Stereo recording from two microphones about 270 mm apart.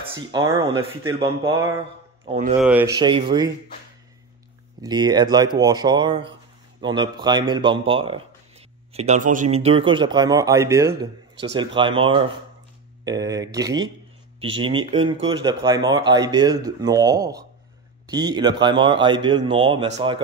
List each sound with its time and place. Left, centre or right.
0.0 s speech: centre
2.2 s speech: right
2.6 s speech: centre
4.8 s speech: centre